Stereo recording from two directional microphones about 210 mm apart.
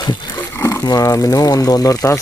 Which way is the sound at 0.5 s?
15° left (ahead or behind).